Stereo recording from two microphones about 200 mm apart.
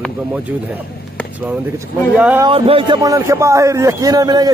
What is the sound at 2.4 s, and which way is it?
A man's voice, 25° right (ahead or behind).